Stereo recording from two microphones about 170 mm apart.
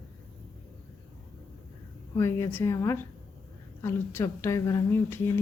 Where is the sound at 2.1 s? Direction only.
15° left (ahead or behind).